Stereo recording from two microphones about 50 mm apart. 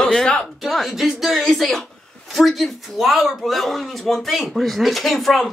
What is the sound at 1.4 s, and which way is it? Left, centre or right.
Speech, centre.